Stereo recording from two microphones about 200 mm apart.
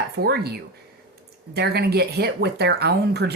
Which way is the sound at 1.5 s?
55° right (ahead or behind).